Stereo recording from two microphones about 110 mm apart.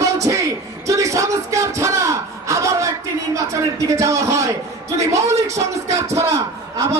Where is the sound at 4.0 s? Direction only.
30° right (ahead or behind).